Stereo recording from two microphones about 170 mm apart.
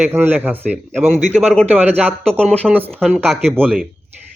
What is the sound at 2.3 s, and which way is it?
Speech, 5° left (ahead or behind).